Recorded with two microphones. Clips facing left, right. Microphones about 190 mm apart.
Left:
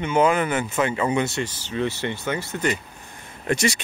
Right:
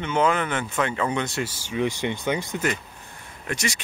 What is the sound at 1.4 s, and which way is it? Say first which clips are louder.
Speech: even; 10° right (ahead or behind).